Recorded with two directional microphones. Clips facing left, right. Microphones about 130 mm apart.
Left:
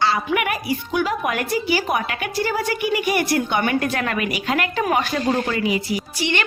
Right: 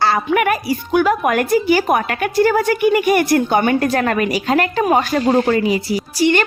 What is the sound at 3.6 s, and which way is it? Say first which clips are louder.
A woman's voice: right 5 dB; 35° right (ahead or behind).